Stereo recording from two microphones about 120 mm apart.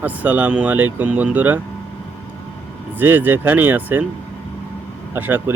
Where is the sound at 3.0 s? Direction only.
15° right (ahead or behind).